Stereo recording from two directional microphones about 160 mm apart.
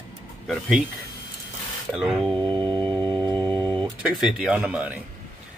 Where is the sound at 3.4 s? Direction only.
25° right (ahead or behind).